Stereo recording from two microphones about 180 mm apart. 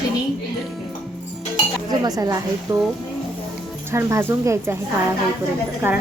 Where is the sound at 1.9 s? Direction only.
20° right (ahead or behind).